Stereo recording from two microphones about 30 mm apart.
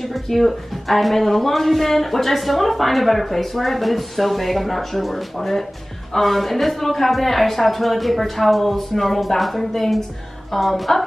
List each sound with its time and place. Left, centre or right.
0.1 s a woman's voice: centre